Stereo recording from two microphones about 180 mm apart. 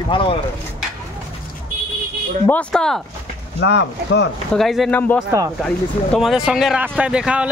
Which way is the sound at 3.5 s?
75° left (ahead or behind).